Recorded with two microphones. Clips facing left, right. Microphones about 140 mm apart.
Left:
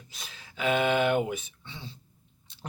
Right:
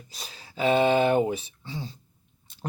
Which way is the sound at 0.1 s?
35° right (ahead or behind).